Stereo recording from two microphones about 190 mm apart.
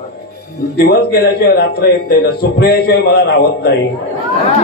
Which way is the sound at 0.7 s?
55° left (ahead or behind).